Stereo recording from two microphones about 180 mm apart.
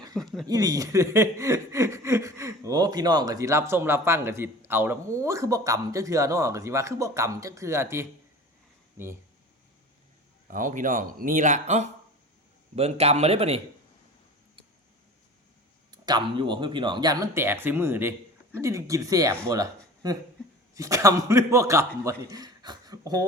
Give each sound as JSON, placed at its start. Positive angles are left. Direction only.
{"t": 0.2, "sound": "speech", "side_deg": 0}
{"t": 0.4, "sound": "speech", "side_deg": -20}
{"t": 10.5, "sound": "a man's voice", "side_deg": -45}
{"t": 15.9, "sound": "speech", "side_deg": -25}